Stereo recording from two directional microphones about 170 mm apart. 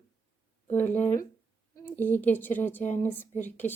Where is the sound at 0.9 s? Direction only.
45° left (ahead or behind).